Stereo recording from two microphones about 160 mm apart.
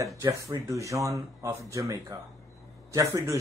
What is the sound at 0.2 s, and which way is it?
Speech, 20° right (ahead or behind).